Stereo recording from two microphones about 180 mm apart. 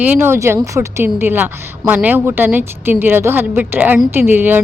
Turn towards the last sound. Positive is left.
turn(degrees=-10)  # may be behind; listen again after turning